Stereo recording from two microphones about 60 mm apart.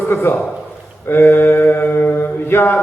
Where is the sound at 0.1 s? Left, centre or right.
Left.